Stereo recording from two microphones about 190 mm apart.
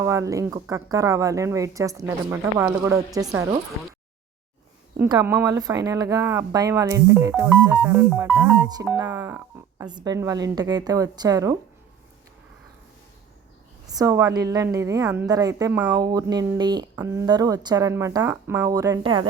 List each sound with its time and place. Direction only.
0.0 s speech: 15° right (ahead or behind)
5.2 s speech: 10° right (ahead or behind)
13.8 s speech: 20° right (ahead or behind)